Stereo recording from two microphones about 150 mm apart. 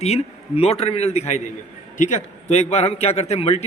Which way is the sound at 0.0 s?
45° left (ahead or behind).